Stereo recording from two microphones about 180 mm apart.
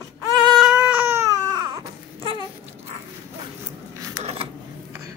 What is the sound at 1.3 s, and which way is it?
Baby cry, 25° right (ahead or behind).